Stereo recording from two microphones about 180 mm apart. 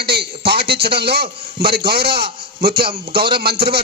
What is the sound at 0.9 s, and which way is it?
A man's voice, 60° right (ahead or behind).